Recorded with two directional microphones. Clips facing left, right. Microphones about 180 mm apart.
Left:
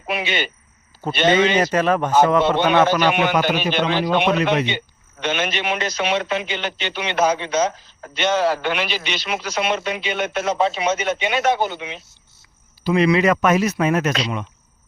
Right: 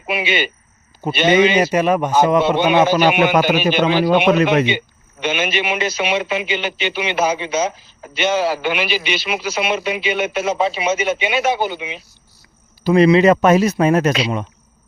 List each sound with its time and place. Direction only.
0.0 s a man's voice: 5° right (ahead or behind)
5.2 s a man's voice: 5° right (ahead or behind)
12.8 s speech: 40° right (ahead or behind)
13.1 s speech: 25° right (ahead or behind)